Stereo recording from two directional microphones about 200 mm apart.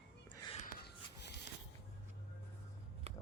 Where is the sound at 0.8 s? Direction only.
55° left (ahead or behind).